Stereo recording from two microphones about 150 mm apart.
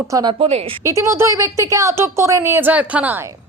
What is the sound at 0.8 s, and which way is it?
A woman's voice, 20° right (ahead or behind).